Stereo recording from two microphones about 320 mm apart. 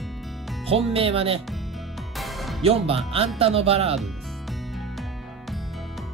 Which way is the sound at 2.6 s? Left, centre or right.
Centre.